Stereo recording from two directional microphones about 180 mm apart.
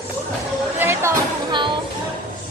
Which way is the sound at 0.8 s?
15° right (ahead or behind).